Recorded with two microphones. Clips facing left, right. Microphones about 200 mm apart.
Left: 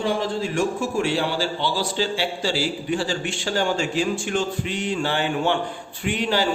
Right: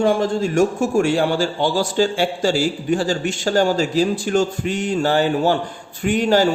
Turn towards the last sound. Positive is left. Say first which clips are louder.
# right 7 dB
turn(degrees=-45)  # may be behind; listen again after turning